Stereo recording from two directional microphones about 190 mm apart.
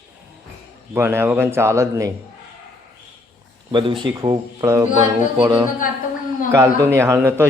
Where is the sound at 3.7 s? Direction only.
25° right (ahead or behind).